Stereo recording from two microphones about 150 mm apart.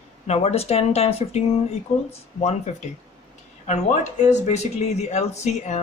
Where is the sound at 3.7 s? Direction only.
50° left (ahead or behind).